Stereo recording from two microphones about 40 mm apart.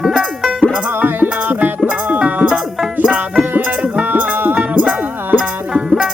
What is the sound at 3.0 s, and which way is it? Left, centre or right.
Music, right.